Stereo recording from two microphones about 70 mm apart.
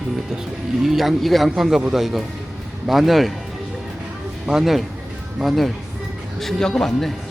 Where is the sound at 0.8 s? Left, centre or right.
Centre.